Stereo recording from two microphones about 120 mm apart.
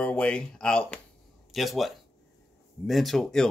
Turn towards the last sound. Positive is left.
turn(degrees=5)  # may be behind; listen again after turning